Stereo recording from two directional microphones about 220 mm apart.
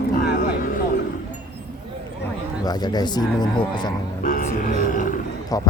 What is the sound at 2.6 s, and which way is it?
Speech, 20° left (ahead or behind).